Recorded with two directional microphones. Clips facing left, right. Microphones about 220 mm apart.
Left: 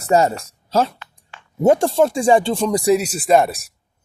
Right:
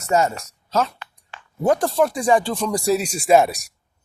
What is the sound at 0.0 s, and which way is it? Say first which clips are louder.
Speech: left 4 dB; 35° left (ahead or behind).